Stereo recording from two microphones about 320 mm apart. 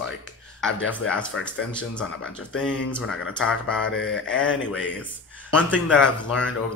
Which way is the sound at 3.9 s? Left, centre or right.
Left.